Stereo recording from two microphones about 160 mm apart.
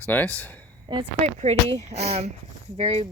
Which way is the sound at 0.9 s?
30° right (ahead or behind).